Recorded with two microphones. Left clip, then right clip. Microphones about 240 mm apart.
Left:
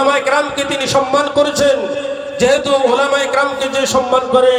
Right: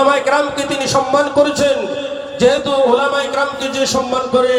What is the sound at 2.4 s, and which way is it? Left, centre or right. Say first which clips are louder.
Speech: even; left.